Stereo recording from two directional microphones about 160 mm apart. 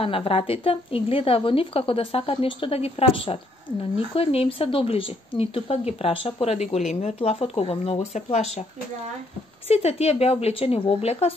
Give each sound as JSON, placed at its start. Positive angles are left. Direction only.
{"t": 0.0, "sound": "speech", "side_deg": 35}
{"t": 9.7, "sound": "speech", "side_deg": 40}